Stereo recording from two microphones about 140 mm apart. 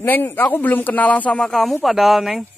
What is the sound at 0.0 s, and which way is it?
Speech, 15° left (ahead or behind).